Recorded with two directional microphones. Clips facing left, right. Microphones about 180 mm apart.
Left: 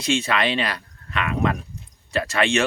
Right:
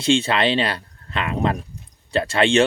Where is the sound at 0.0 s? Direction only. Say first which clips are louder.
Right 4 dB; 30° right (ahead or behind).